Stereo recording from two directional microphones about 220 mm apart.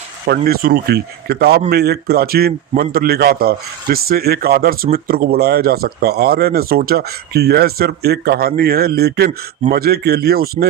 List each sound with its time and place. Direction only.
0.3 s speech: 45° right (ahead or behind)